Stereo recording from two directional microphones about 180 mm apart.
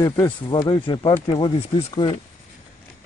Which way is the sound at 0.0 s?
25° left (ahead or behind).